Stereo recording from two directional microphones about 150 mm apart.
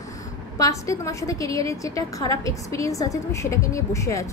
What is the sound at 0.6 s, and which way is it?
A woman's voice, 20° left (ahead or behind).